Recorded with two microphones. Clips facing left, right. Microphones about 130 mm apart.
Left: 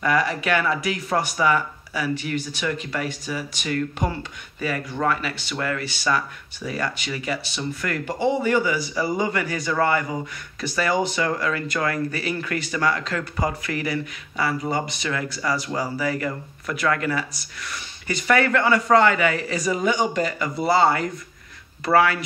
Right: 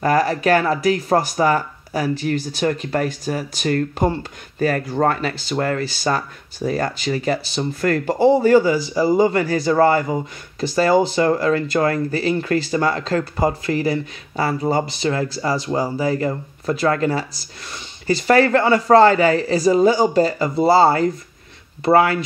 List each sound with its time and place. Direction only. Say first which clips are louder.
0.0 s speech: right 5 dB; 40° right (ahead or behind)
4.0 s speech: right 7 dB; 30° right (ahead or behind)
4.6 s speech: right 7 dB; 45° right (ahead or behind); by 22.2 s 25° right (ahead or behind)